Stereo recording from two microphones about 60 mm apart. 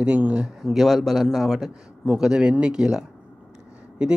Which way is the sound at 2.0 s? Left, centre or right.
Centre.